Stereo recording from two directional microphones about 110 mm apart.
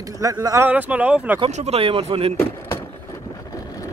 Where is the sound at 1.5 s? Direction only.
80° right; by 2.3 s 55° right (ahead or behind).